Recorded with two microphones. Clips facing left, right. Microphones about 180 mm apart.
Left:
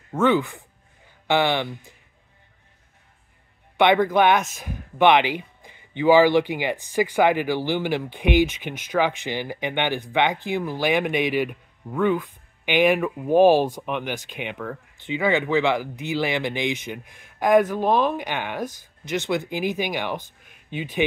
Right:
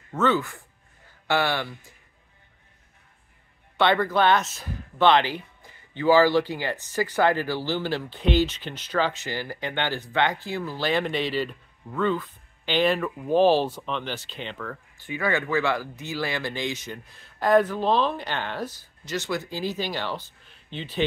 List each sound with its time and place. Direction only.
0.1 s speech: 15° left (ahead or behind)
3.7 s speech: 15° left (ahead or behind)
20.4 s a sound: 10° left (ahead or behind)